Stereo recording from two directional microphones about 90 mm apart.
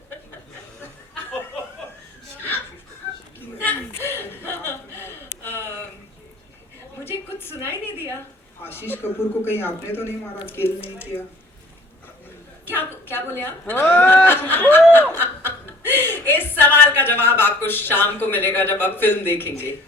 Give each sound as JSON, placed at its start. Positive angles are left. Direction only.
{"t": 3.7, "sound": "chuckle", "side_deg": 30}
{"t": 7.3, "sound": "a sound", "side_deg": 25}
{"t": 8.6, "sound": "speech", "side_deg": 25}
{"t": 12.7, "sound": "a woman's voice", "side_deg": 25}
{"t": 15.1, "sound": "chuckle", "side_deg": 25}